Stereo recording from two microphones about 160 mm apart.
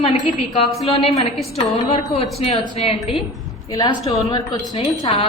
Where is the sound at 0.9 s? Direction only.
35° left (ahead or behind).